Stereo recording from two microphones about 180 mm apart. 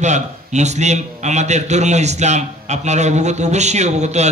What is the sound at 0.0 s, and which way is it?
A man's voice, 40° right (ahead or behind).